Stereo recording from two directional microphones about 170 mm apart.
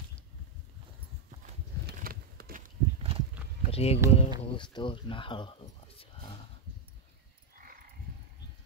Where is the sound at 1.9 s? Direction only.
60° right (ahead or behind).